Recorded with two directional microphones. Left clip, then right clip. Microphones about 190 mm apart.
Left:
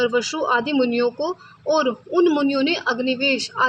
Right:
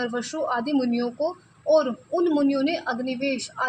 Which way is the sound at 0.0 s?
30° left (ahead or behind).